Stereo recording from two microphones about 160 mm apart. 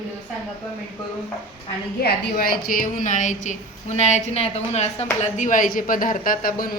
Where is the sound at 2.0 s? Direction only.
65° left (ahead or behind).